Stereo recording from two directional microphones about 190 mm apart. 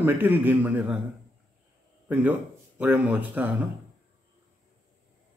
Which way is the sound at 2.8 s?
10° right (ahead or behind).